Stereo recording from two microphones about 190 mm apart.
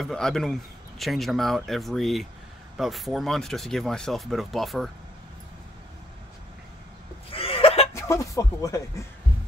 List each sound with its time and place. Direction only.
0.0 s speech: 5° left (ahead or behind)
7.2 s a sound: 30° left (ahead or behind)
7.9 s speech: 15° left (ahead or behind)